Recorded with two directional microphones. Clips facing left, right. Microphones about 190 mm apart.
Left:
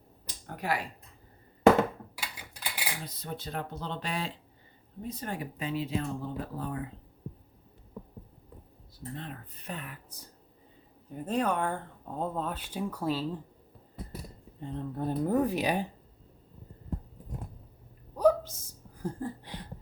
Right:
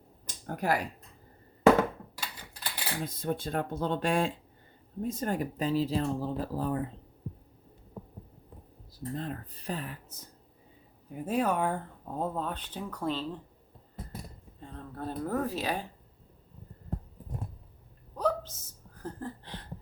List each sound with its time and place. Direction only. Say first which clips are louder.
0.3 s finger snapping: right 3 dB; 45° right (ahead or behind)
2.1 s cutlery: even; 10° left (ahead or behind)
3.0 s speech: right 7 dB; 50° right (ahead or behind)
9.1 s speech: right 7 dB; 40° right (ahead or behind)
11.1 s speech: right 1 dB; 10° right (ahead or behind); by 13.2 s 10° left (ahead or behind)
14.6 s speech: left 5 dB; 20° left (ahead or behind)
18.2 s hiccup: left 6 dB; 10° left (ahead or behind)
19.0 s a sound: left 3 dB; 10° left (ahead or behind)